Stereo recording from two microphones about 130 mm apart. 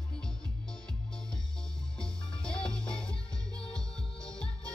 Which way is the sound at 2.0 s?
5° left (ahead or behind).